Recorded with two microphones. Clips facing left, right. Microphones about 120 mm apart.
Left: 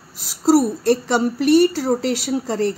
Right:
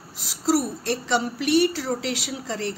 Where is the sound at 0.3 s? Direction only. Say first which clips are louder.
Left 7 dB; 45° left (ahead or behind).